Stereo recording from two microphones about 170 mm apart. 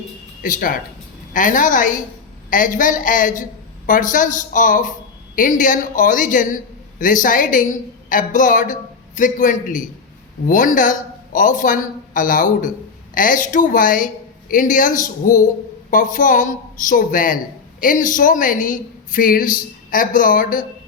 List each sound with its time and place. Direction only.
0.4 s a woman's voice: 55° left (ahead or behind)